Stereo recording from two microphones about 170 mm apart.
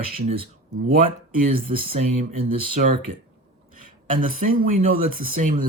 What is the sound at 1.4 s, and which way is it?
Speech, 55° right (ahead or behind).